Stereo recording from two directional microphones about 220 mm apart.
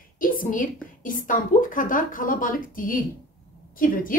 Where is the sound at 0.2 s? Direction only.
40° left (ahead or behind).